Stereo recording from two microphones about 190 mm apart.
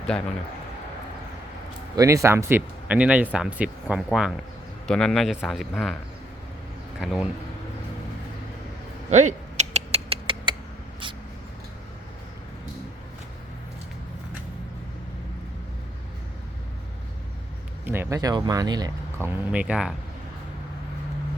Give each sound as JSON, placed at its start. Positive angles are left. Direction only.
{"t": 2.0, "sound": "speech", "side_deg": -15}
{"t": 7.0, "sound": "speech", "side_deg": -5}
{"t": 9.0, "sound": "a sound", "side_deg": -40}
{"t": 17.8, "sound": "speech", "side_deg": -10}